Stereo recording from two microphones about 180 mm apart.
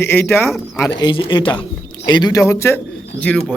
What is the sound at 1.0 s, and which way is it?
A man's voice, 25° left (ahead or behind).